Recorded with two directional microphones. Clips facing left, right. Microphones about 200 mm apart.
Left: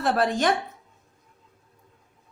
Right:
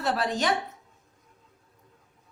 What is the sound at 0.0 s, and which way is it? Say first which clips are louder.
Speech: left 4 dB; 50° left (ahead or behind).